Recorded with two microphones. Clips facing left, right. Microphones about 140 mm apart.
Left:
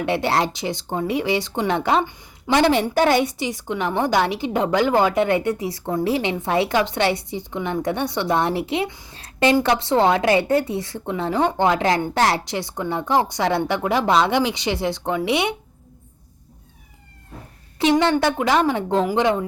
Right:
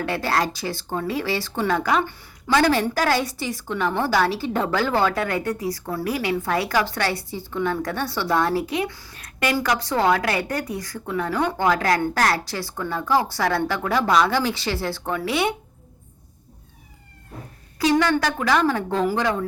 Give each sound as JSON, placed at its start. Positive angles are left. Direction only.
{"t": 0.0, "sound": "speech", "side_deg": 25}
{"t": 17.7, "sound": "speech", "side_deg": 25}